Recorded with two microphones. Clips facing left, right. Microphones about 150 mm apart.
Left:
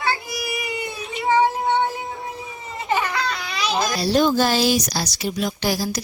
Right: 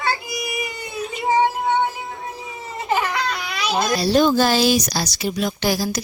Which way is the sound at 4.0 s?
90° right.